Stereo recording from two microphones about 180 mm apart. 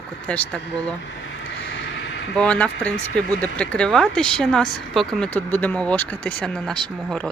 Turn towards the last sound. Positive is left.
turn(degrees=5)  # may be behind; listen again after turning